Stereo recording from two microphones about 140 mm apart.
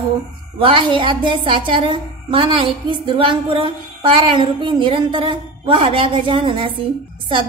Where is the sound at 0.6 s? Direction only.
40° right (ahead or behind).